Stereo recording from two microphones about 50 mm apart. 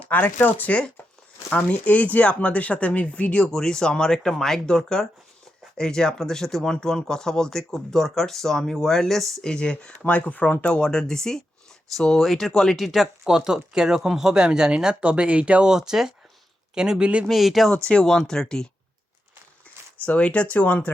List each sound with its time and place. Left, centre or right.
0.3 s speech: left; by 9.5 s centre
9.5 s speech: centre
10.0 s speech: left
10.8 s speech: centre; by 15.7 s right
15.7 s speech: centre
17.2 s speech: centre
17.8 s speech: centre
20.1 s speech: left